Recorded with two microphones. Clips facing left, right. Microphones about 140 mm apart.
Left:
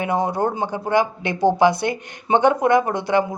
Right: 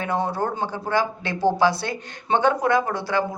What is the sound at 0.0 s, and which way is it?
Speech, 15° left (ahead or behind).